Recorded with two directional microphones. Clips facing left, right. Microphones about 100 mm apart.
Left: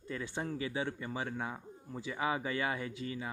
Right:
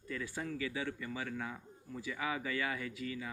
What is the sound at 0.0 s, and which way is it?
Speech, 25° left (ahead or behind).